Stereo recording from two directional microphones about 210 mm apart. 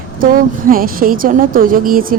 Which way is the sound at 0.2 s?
40° right (ahead or behind).